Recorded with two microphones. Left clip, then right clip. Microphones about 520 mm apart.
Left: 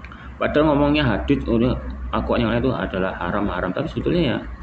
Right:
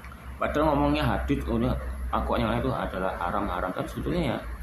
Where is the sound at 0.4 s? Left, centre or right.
Right.